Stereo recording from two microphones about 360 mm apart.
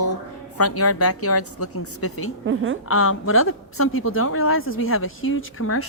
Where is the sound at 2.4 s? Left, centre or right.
Right.